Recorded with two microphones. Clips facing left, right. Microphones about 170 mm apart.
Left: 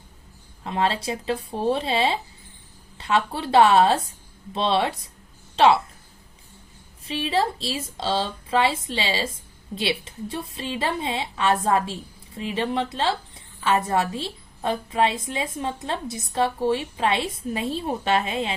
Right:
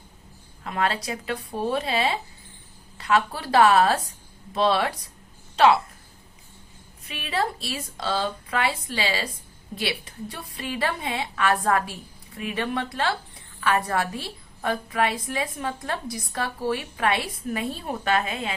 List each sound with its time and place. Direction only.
0.6 s a woman's voice: 25° left (ahead or behind)
7.0 s a woman's voice: 30° left (ahead or behind)